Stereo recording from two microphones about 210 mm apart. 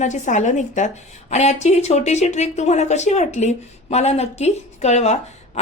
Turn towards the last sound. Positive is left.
turn(degrees=30)  # may be behind; listen again after turning